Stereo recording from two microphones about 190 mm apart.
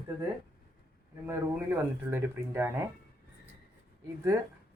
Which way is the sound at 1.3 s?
10° right (ahead or behind).